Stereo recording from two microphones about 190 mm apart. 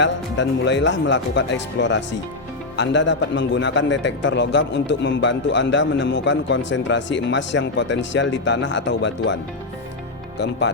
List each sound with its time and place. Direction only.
0.0 s a man's voice: 70° left (ahead or behind)
10.3 s speech: 65° left (ahead or behind)